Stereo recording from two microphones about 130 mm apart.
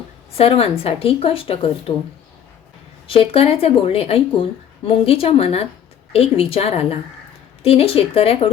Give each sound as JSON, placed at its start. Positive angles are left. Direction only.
{"t": 0.3, "sound": "a woman's voice", "side_deg": 50}
{"t": 3.1, "sound": "a woman's voice", "side_deg": 45}